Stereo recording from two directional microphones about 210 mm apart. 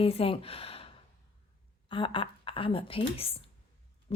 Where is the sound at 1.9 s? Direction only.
25° left (ahead or behind).